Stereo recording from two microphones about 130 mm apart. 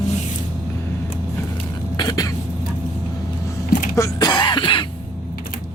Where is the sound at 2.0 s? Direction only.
30° left (ahead or behind).